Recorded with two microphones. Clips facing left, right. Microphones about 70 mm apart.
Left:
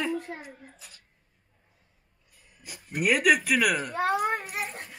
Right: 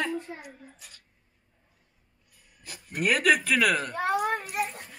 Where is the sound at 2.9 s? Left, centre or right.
Centre.